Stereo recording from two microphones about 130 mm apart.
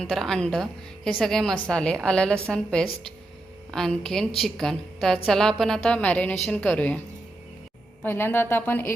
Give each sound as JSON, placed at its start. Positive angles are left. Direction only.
{"t": 0.0, "sound": "a woman's voice", "side_deg": 5}
{"t": 8.0, "sound": "a woman's voice", "side_deg": 15}